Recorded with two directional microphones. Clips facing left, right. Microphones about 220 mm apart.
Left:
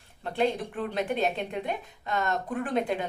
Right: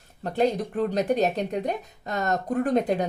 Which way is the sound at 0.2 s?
40° right (ahead or behind).